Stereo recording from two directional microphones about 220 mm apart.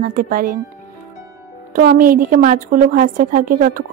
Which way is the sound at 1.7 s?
45° right (ahead or behind).